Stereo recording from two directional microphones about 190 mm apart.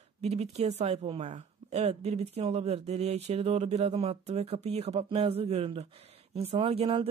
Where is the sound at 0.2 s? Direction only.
35° right (ahead or behind).